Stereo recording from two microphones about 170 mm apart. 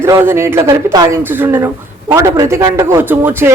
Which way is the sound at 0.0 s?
15° right (ahead or behind).